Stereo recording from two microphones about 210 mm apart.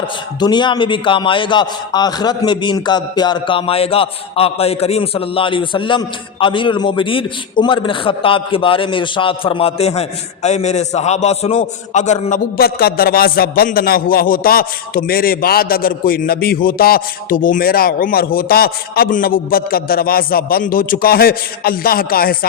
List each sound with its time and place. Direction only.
0.3 s a man's voice: 20° left (ahead or behind); by 22.4 s 45° left (ahead or behind)